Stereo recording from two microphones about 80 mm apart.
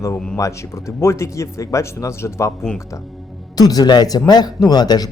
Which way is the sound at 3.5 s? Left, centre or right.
Left.